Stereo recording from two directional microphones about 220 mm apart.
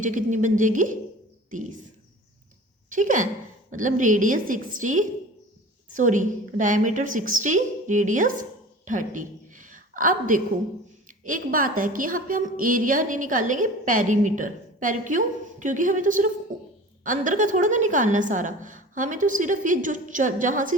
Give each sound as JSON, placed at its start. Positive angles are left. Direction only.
{"t": 0.0, "sound": "a woman's voice", "side_deg": -35}
{"t": 2.9, "sound": "a woman's voice", "side_deg": -35}